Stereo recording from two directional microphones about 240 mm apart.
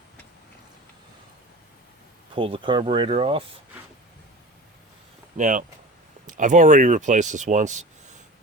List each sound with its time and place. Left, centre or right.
2.3 s speech: right
5.4 s speech: right